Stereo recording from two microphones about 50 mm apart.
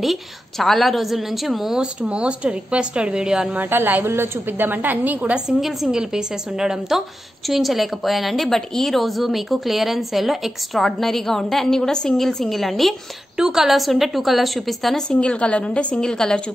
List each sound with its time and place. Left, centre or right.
0.0 s a woman's voice: centre
1.8 s speech: right
3.5 s a woman's voice: right
5.6 s a woman's voice: centre
13.4 s a woman's voice: centre
15.0 s a woman's voice: left